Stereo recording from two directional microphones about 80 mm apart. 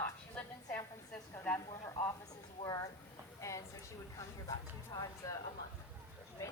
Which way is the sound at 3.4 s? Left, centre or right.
Left.